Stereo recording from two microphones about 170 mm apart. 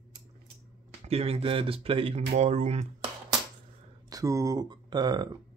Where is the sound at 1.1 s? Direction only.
35° right (ahead or behind).